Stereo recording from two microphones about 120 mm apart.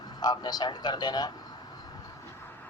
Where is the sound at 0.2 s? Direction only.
35° left (ahead or behind).